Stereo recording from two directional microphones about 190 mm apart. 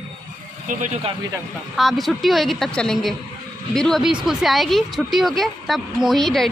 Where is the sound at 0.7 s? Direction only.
40° right (ahead or behind).